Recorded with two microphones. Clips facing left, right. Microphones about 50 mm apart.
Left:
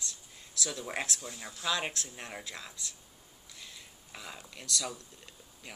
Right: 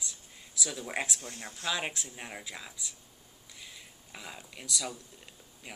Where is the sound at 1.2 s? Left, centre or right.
Right.